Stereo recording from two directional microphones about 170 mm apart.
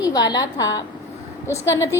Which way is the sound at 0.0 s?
25° left (ahead or behind).